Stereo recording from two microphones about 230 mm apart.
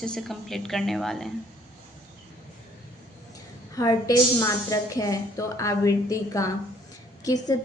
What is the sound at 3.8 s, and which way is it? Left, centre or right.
A woman's voice, centre.